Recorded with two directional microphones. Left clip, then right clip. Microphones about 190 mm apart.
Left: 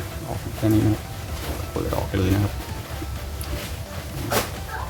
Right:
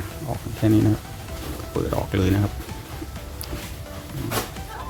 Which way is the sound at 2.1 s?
35° right (ahead or behind).